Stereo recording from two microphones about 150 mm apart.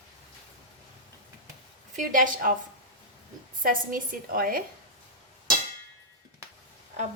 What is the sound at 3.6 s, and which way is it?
A woman's voice, 65° right (ahead or behind).